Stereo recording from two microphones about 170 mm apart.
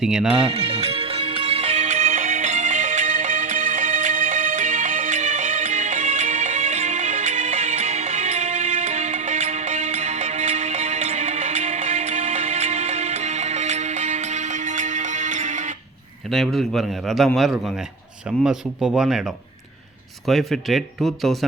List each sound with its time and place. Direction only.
0.0 s a man's voice: 5° right (ahead or behind)
0.4 s music: 35° right (ahead or behind)
16.3 s a man's voice: centre (ahead or behind)